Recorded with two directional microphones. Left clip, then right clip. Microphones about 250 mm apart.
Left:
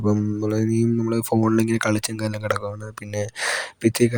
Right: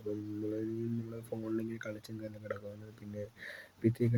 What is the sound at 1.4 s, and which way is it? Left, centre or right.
Speech, left.